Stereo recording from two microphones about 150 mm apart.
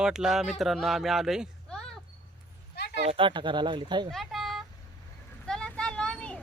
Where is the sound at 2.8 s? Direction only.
90° left.